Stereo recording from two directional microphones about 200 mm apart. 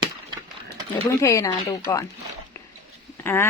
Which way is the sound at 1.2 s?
15° left (ahead or behind).